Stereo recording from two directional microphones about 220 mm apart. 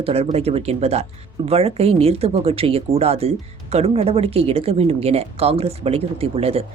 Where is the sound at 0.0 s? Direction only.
25° right (ahead or behind).